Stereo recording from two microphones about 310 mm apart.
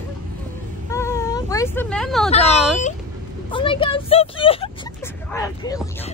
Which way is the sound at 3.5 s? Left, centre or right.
Centre.